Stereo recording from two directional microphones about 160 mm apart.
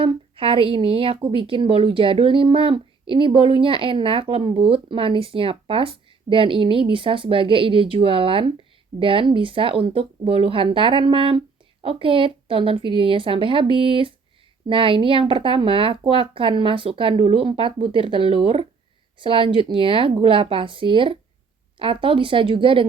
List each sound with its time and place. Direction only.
0.0 s a woman's voice: 35° right (ahead or behind)